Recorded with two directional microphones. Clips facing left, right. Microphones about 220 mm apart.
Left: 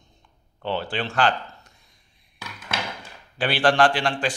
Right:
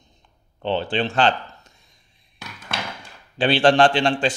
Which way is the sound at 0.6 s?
25° right (ahead or behind).